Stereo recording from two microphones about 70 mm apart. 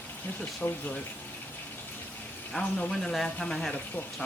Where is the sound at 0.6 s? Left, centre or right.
Left.